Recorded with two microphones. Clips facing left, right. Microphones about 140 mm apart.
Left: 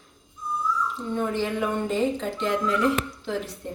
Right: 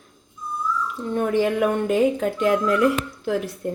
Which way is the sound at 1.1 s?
60° right (ahead or behind).